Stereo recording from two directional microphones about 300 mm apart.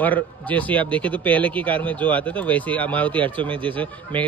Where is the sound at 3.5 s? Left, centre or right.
Centre.